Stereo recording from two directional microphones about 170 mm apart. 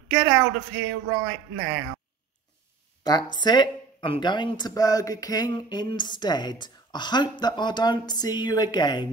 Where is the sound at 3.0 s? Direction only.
25° left (ahead or behind).